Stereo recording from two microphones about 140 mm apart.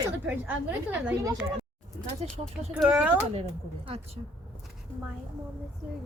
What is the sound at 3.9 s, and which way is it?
Speech, 45° right (ahead or behind).